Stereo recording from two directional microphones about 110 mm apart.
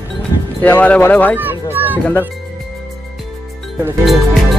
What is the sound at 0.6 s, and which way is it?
Speech, 15° left (ahead or behind).